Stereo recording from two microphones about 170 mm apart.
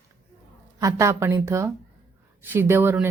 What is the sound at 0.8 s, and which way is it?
Speech, 15° right (ahead or behind).